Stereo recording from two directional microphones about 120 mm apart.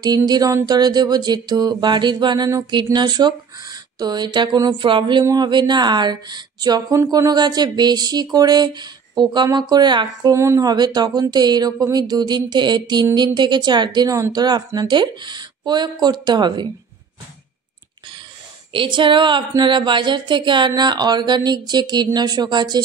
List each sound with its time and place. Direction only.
0.0 s speech: 35° right (ahead or behind)
10.3 s speech: 25° right (ahead or behind)
18.7 s speech: 45° right (ahead or behind)